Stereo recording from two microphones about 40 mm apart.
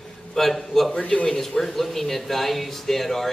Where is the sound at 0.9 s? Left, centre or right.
Left.